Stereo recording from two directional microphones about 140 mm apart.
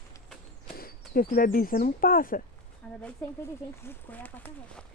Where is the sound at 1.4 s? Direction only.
90° left.